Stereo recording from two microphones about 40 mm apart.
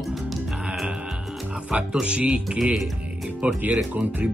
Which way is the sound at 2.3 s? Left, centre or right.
Centre.